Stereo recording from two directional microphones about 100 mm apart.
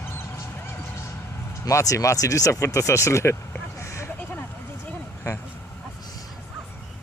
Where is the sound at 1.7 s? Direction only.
30° left (ahead or behind).